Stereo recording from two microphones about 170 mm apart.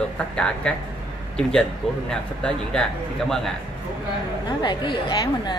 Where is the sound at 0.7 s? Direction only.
5° left (ahead or behind).